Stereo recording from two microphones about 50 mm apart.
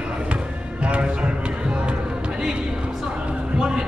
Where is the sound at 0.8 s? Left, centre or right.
Right.